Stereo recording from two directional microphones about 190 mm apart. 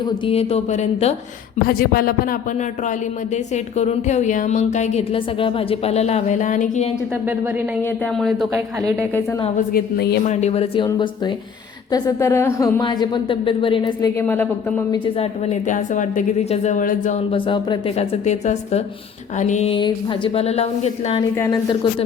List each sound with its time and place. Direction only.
0.0 s speech: 30° left (ahead or behind)
1.6 s speech: 50° left (ahead or behind)
3.3 s speech: 35° left (ahead or behind)
7.8 s speech: 10° left (ahead or behind)
9.7 s speech: 55° left (ahead or behind)
10.2 s a woman's voice: 35° left (ahead or behind)
14.2 s speech: 10° left (ahead or behind)
15.0 s speech: 35° left (ahead or behind)
17.3 s speech: 25° left (ahead or behind)
21.3 s speech: 15° left (ahead or behind)